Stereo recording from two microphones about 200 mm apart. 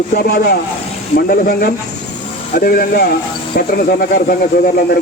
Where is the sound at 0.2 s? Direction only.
50° left (ahead or behind).